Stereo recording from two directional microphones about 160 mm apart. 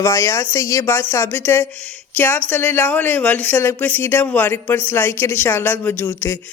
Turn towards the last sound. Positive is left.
turn(degrees=15)  # may be behind; listen again after turning